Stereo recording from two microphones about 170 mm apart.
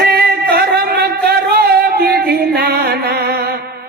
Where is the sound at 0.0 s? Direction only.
65° right (ahead or behind).